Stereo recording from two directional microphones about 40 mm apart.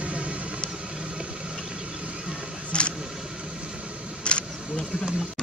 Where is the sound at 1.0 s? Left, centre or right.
Right.